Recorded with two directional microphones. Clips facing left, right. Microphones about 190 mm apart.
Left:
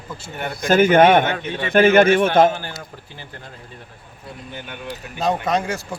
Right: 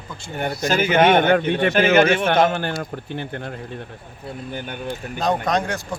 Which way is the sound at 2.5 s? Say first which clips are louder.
Right 4 dB; 60° right (ahead or behind).